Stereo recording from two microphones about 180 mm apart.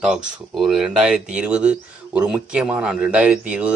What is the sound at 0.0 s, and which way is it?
Speech, centre (ahead or behind).